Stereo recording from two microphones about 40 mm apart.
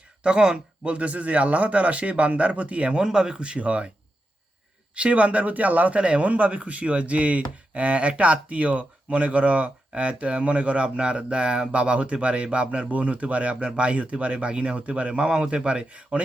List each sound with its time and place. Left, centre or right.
0.2 s speech: right
3.0 s speech: centre
4.9 s speech: right
6.0 s speech: right